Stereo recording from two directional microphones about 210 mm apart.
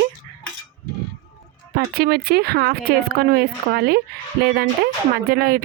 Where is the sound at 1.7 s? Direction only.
45° right (ahead or behind).